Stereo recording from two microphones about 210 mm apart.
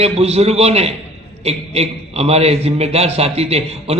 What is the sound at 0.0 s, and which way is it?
A man's voice, 30° right (ahead or behind).